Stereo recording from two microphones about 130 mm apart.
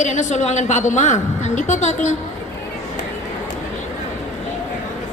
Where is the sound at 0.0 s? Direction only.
65° left (ahead or behind).